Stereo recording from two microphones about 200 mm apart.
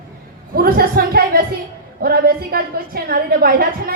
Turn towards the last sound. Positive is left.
turn(degrees=-50)  # may be behind; listen again after turning